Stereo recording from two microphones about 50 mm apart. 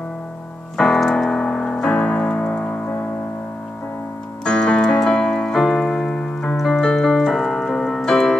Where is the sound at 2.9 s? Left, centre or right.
Left.